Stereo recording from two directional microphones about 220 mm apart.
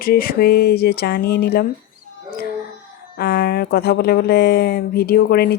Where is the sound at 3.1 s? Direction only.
45° left (ahead or behind).